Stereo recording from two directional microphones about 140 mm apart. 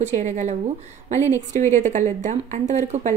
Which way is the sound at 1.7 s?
60° right (ahead or behind).